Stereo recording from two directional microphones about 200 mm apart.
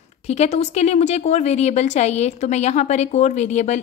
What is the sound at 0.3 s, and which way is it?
A woman's voice, 35° left (ahead or behind).